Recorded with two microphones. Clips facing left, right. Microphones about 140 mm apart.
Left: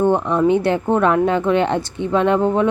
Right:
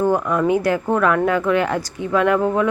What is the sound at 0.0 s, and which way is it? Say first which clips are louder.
Speech: left 2 dB; 25° left (ahead or behind).